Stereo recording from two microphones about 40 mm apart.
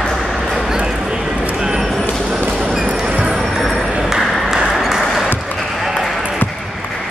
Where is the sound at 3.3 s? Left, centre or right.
Centre.